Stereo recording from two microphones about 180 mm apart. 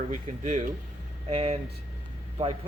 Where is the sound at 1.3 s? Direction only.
35° right (ahead or behind).